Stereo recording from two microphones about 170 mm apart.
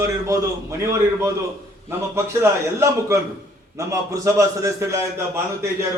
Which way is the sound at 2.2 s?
15° right (ahead or behind).